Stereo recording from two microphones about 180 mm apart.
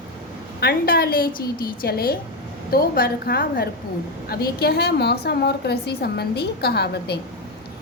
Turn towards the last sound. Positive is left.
turn(degrees=65)  # may be behind; listen again after turning